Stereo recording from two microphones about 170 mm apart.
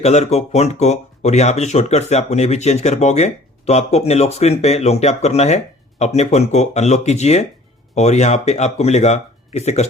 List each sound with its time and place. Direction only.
0.0 s speech: 40° left (ahead or behind)